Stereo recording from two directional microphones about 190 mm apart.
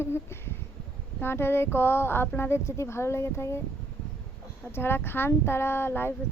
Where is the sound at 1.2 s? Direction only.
10° left (ahead or behind).